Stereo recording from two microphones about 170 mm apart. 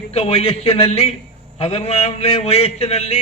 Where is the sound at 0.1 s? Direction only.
40° left (ahead or behind).